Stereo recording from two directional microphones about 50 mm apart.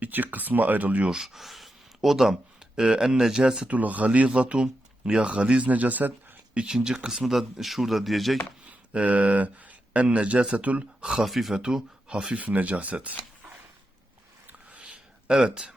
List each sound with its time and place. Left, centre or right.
0.0 s speech: right
1.2 s speech: centre
3.7 s speech: right
6.5 s speech: centre
8.6 s speech: right
11.2 s speech: centre
11.5 s speech: centre
12.4 s speech: right
14.4 s a sound: right
14.8 s a sound: centre